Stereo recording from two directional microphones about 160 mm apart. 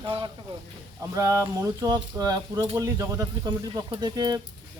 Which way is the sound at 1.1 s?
20° right (ahead or behind).